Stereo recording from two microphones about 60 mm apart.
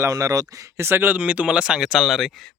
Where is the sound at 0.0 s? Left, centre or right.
Right.